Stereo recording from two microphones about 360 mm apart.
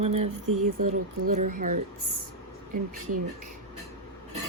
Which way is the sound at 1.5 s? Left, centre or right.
Right.